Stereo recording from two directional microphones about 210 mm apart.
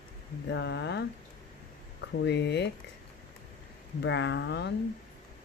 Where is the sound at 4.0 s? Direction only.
55° left (ahead or behind).